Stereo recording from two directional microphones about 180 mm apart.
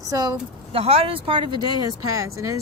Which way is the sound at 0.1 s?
20° right (ahead or behind).